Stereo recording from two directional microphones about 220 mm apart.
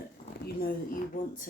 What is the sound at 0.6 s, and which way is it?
Speech, 40° left (ahead or behind).